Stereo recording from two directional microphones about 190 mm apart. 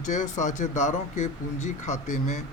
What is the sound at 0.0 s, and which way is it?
Speech, 40° left (ahead or behind).